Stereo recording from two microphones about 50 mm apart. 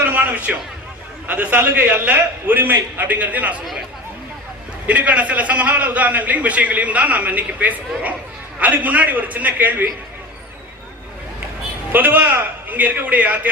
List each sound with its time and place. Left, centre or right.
0.0 s a sound: right
1.3 s a man's voice: right
4.9 s a man's voice: right
11.9 s a man's voice: right